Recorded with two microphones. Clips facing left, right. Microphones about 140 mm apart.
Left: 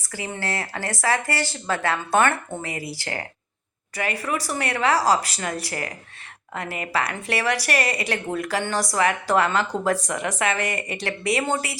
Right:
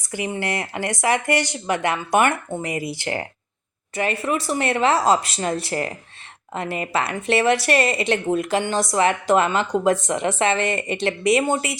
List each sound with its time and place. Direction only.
0.1 s speech: 20° right (ahead or behind)